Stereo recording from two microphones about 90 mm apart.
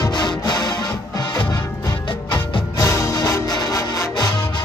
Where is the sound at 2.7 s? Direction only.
35° left (ahead or behind).